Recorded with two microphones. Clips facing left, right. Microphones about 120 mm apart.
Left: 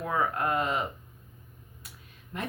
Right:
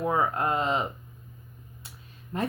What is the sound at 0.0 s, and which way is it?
Speech, 25° right (ahead or behind).